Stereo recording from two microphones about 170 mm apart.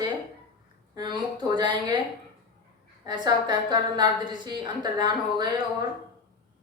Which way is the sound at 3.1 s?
25° right (ahead or behind).